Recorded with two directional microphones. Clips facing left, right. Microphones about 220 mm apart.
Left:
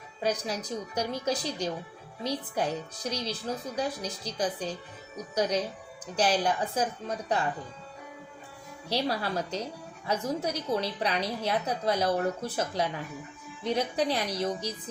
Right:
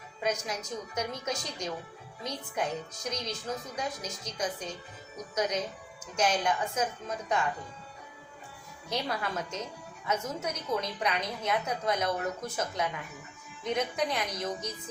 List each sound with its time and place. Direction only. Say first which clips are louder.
0.2 s a woman's voice: left 2 dB; 35° left (ahead or behind)
8.9 s a woman's voice: left 4 dB; 35° left (ahead or behind)